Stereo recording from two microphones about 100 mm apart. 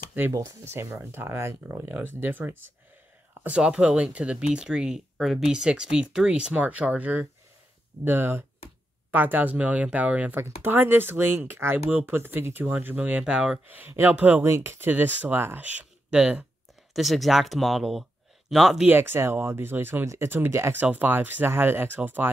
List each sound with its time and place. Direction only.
0.3 s speech: 30° right (ahead or behind); by 16.4 s 10° right (ahead or behind)
16.9 s speech: centre (ahead or behind)
18.9 s speech: 20° right (ahead or behind)